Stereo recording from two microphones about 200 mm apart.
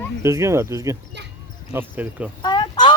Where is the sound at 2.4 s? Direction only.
20° left (ahead or behind).